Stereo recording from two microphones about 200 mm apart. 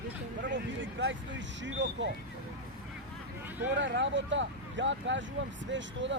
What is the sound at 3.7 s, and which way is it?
Speech, 65° right (ahead or behind).